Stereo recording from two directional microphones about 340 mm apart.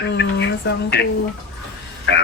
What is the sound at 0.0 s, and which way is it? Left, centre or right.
A woman's voice, left.